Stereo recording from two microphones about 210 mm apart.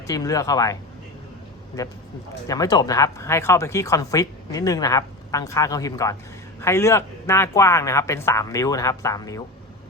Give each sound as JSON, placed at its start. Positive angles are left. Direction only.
{"t": 0.1, "sound": "speech", "side_deg": 15}
{"t": 2.5, "sound": "speech", "side_deg": 20}